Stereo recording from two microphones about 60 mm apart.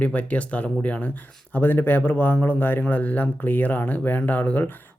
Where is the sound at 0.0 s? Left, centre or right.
Left.